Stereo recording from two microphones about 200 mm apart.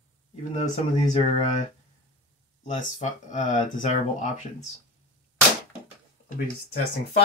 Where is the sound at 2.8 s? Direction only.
40° left (ahead or behind).